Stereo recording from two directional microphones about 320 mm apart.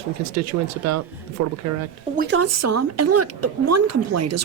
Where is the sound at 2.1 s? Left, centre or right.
Right.